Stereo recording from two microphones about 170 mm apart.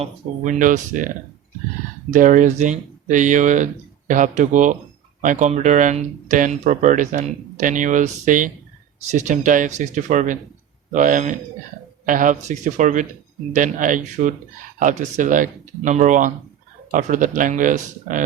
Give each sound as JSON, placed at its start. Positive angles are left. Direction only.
{"t": 0.0, "sound": "speech", "side_deg": -45}
{"t": 2.1, "sound": "speech", "side_deg": -50}